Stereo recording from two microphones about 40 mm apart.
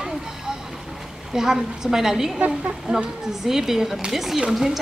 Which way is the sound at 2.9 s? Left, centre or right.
Right.